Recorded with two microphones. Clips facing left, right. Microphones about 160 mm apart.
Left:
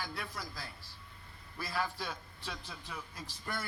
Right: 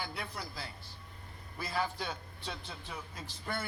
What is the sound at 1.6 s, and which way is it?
Speech, 20° right (ahead or behind).